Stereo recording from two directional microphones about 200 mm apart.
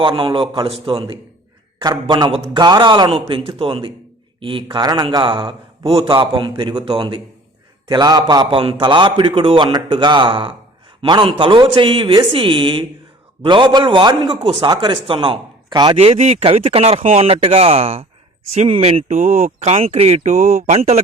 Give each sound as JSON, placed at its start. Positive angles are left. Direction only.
{"t": 0.0, "sound": "a man's voice", "side_deg": -25}